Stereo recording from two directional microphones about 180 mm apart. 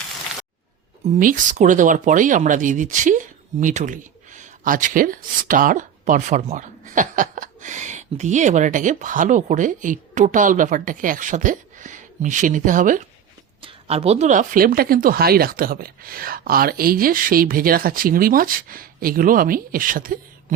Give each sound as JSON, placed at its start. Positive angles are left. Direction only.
{"t": 1.0, "sound": "speech", "side_deg": -45}
{"t": 13.6, "sound": "speech", "side_deg": -30}